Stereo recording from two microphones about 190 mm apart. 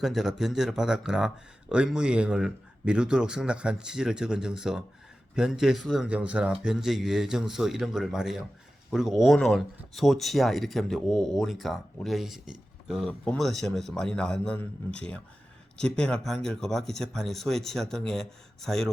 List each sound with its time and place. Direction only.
0.0 s speech: centre (ahead or behind)